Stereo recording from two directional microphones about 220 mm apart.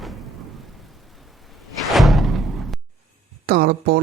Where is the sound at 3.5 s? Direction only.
45° right (ahead or behind).